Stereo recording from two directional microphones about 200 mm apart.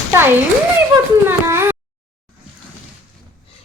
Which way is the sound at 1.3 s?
10° right (ahead or behind).